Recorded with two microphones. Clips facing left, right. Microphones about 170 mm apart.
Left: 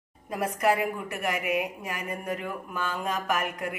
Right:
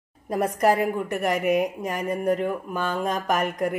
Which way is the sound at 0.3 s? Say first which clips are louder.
Right 4 dB; 35° right (ahead or behind).